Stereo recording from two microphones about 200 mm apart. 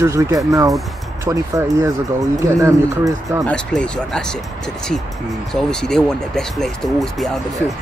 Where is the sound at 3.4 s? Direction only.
5° left (ahead or behind).